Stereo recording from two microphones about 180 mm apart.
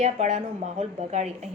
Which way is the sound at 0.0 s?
40° right (ahead or behind).